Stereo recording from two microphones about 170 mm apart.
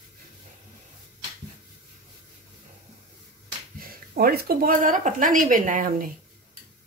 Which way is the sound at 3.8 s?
60° right (ahead or behind).